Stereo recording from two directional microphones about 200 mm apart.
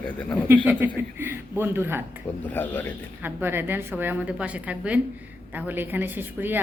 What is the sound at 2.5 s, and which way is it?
Speech, 10° left (ahead or behind).